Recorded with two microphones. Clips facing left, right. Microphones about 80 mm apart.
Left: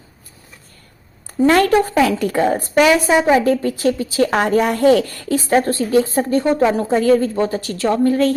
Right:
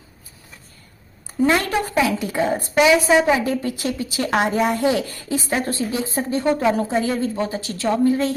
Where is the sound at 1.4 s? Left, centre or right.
Left.